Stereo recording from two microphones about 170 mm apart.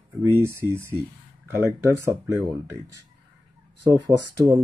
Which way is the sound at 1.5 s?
15° right (ahead or behind).